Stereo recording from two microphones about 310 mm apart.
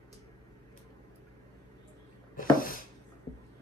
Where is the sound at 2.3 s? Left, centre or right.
Left.